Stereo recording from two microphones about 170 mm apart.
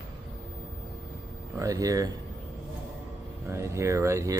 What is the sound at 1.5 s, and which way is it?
Speech, 20° right (ahead or behind).